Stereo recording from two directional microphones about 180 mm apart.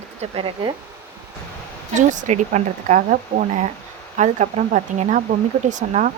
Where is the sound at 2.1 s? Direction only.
40° right (ahead or behind).